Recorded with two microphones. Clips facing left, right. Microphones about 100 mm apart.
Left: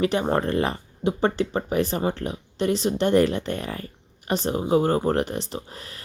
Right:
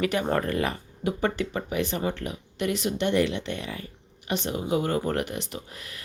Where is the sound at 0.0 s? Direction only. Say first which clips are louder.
Left 3 dB; 30° left (ahead or behind).